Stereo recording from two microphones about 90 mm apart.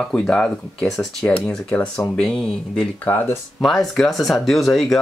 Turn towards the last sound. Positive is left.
turn(degrees=5)  # may be behind; listen again after turning